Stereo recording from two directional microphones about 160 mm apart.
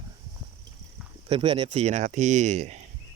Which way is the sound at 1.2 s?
35° right (ahead or behind).